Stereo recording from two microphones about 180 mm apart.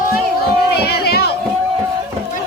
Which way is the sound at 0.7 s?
60° left (ahead or behind).